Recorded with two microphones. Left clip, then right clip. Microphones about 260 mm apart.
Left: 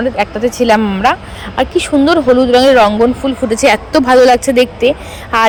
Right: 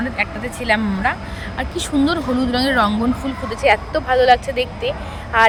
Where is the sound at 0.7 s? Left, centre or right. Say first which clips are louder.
Left 6 dB; left.